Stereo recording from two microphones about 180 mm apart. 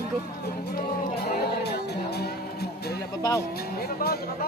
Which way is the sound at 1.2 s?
65° left (ahead or behind).